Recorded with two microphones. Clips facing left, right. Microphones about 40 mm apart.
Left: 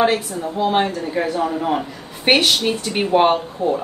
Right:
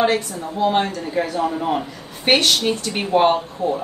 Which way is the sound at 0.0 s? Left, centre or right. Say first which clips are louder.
Left 1 dB; centre.